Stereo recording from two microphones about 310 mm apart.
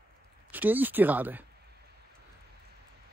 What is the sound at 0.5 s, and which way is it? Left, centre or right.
Speech, centre.